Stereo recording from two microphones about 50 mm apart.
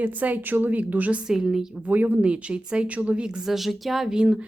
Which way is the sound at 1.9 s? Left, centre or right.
Right.